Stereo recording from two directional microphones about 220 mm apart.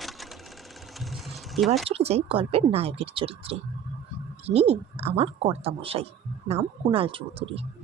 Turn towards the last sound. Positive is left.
turn(degrees=-25)  # may be behind; listen again after turning